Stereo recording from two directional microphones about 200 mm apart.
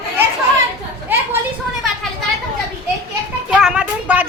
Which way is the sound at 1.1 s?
10° right (ahead or behind).